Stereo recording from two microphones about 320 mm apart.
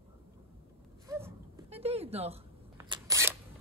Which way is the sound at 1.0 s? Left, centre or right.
Centre.